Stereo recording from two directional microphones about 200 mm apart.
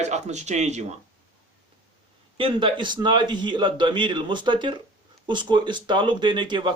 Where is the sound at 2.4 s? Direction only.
25° right (ahead or behind).